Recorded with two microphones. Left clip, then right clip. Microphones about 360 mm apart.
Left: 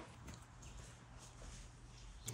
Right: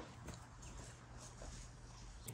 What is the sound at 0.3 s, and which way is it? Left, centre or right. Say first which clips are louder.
Dog: right 3 dB; right.